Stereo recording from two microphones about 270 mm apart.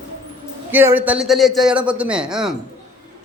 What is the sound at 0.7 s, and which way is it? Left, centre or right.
A man's voice, centre.